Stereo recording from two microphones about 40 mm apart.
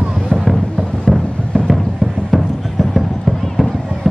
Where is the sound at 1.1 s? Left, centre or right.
Centre.